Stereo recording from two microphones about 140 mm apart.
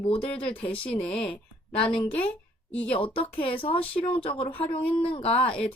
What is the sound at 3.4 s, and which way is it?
Speech, 40° left (ahead or behind).